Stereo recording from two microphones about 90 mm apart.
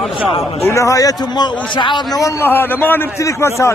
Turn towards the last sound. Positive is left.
turn(degrees=35)  # may be behind; listen again after turning